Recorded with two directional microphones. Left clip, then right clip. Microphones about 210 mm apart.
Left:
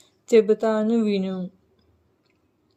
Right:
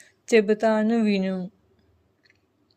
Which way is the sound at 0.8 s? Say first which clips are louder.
Left 1 dB; 20° right (ahead or behind).